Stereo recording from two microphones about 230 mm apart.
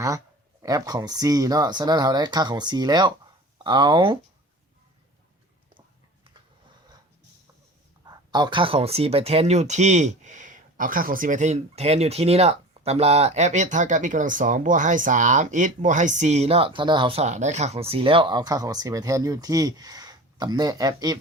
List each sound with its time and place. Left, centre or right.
0.6 s speech: centre
8.0 s speech: centre